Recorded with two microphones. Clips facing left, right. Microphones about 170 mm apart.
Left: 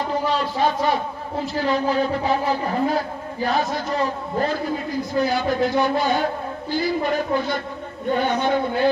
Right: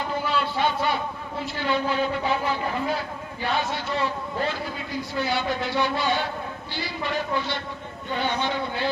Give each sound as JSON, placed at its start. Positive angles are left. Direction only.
{"t": 0.1, "sound": "a man's voice", "side_deg": 35}